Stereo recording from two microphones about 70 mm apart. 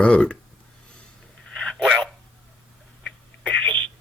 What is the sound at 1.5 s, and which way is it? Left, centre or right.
Dog, centre.